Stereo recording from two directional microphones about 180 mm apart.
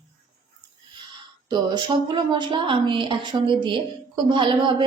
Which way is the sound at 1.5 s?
25° right (ahead or behind).